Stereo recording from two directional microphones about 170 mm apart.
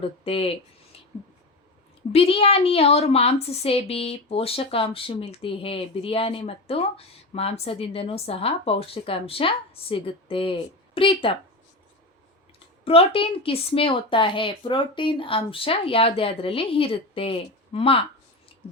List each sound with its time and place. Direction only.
0.0 s speech: 35° left (ahead or behind)
2.1 s speech: 35° left (ahead or behind)
12.8 s speech: 35° left (ahead or behind)